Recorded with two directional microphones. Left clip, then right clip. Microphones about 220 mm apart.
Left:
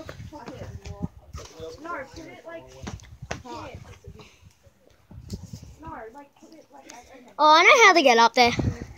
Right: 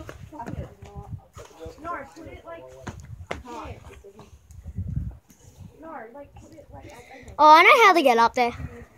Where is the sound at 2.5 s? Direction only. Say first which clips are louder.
Left 1 dB; 55° left (ahead or behind).